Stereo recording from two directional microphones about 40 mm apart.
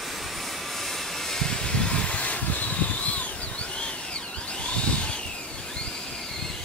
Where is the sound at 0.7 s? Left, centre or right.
Centre; by 3.3 s left.